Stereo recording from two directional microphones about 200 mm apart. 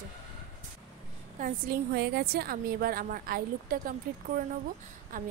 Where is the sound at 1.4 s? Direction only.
50° right (ahead or behind).